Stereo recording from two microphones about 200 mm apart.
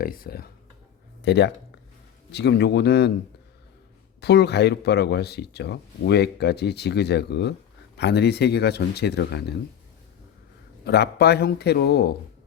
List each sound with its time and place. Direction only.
0.0 s speech: 45° left (ahead or behind)
4.2 s speech: 55° left (ahead or behind)
10.8 s a man's voice: 55° left (ahead or behind)